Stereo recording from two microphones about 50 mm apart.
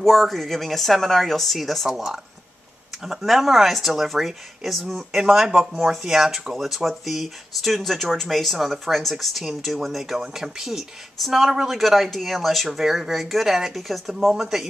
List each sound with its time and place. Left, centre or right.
0.0 s speech: centre
5.5 s speech: centre
5.9 s speech: centre